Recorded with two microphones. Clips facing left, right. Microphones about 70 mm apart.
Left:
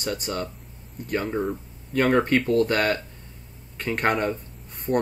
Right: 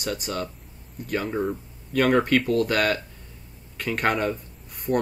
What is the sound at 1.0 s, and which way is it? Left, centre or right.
Speech, left.